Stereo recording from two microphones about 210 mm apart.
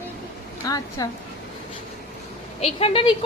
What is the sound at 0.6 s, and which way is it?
Speech, 15° left (ahead or behind).